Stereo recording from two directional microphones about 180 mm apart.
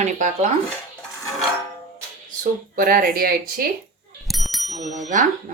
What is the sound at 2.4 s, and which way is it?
Speech, 55° right (ahead or behind).